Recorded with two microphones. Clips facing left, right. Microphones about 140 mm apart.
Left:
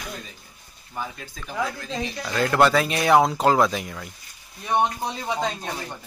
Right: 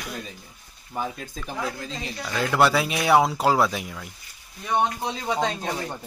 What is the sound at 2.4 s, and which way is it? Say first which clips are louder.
Speech: left 2 dB; 5° right (ahead or behind).